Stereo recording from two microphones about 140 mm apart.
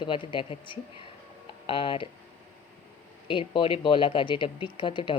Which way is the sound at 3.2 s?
35° left (ahead or behind).